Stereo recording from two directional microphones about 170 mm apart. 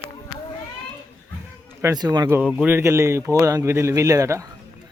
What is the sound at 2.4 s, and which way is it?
Speech, 10° right (ahead or behind).